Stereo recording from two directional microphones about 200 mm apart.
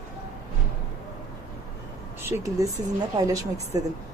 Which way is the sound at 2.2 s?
15° right (ahead or behind).